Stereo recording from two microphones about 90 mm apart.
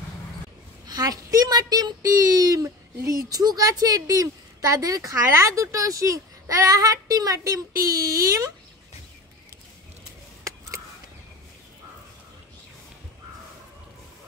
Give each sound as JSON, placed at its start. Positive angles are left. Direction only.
{"t": 0.8, "sound": "a woman's voice", "side_deg": -45}